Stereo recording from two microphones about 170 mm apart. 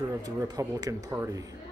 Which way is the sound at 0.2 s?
20° right (ahead or behind).